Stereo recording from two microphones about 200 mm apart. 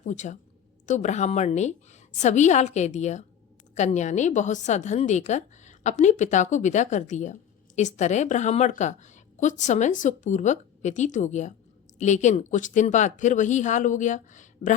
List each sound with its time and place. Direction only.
0.0 s a woman's voice: 35° left (ahead or behind)